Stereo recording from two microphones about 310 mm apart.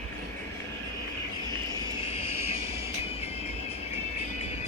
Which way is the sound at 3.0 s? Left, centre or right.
Centre.